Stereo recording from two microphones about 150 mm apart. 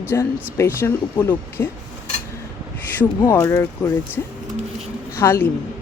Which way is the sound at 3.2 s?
15° left (ahead or behind).